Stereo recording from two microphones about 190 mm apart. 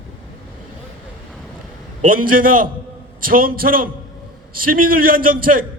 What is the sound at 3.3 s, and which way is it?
A man's voice, 50° right (ahead or behind).